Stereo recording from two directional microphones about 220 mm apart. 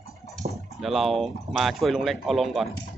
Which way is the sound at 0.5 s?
Centre (ahead or behind).